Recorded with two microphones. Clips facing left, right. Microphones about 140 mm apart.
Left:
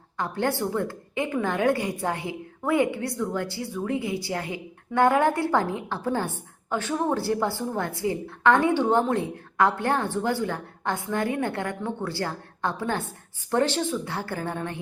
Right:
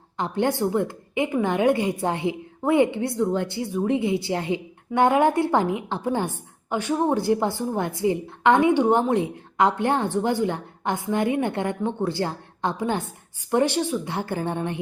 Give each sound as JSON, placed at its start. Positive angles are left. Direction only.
{"t": 0.2, "sound": "a woman's voice", "side_deg": -20}